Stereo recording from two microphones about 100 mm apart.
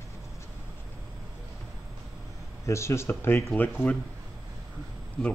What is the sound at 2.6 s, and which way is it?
Speech, 30° left (ahead or behind).